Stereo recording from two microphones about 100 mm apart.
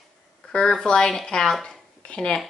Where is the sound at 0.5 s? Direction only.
5° left (ahead or behind).